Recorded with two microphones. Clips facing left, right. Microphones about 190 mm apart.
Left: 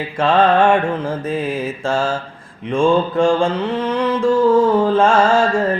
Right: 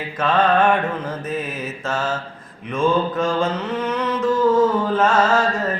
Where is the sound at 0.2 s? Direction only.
30° left (ahead or behind).